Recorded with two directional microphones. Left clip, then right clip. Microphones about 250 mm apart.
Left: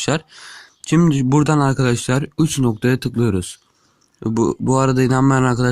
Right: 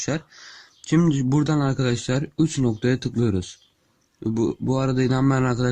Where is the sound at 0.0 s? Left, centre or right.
Centre.